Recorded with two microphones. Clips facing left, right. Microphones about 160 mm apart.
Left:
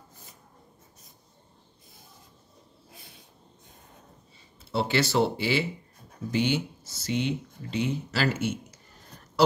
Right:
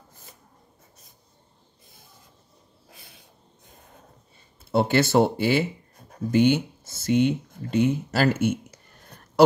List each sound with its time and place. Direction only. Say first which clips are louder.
4.6 s speech: right 5 dB; 50° right (ahead or behind)